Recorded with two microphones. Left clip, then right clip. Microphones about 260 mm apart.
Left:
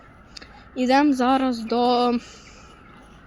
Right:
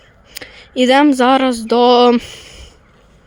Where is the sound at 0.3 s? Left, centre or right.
Right.